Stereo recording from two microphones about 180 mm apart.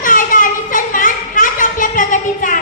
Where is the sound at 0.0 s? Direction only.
50° left (ahead or behind).